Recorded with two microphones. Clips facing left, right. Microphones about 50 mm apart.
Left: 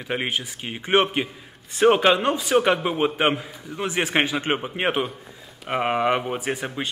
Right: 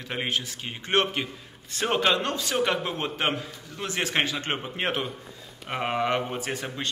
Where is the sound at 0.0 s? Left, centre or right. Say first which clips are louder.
Left 3 dB; centre.